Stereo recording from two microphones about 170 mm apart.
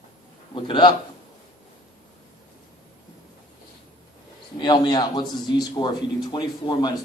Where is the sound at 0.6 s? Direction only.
30° left (ahead or behind).